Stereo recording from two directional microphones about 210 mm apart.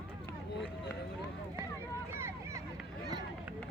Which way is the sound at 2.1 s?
10° right (ahead or behind).